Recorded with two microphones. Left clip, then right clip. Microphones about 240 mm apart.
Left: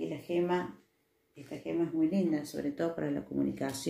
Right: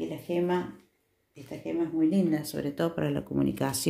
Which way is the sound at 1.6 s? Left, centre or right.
Right.